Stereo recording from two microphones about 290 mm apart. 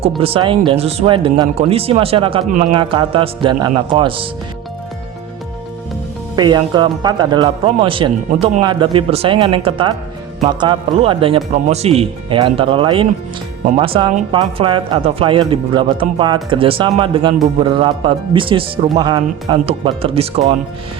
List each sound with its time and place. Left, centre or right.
0.2 s speech: centre
6.3 s speech: centre